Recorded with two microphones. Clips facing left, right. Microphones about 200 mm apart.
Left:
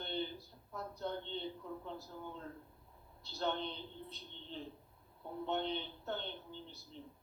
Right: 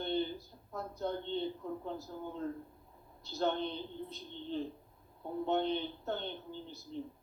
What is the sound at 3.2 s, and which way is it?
Speech, 45° right (ahead or behind).